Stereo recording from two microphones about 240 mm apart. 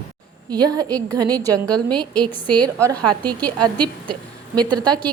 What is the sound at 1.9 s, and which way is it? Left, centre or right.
Speech, centre.